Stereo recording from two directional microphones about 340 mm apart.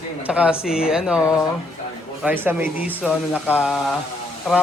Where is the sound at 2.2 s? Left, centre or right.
Centre.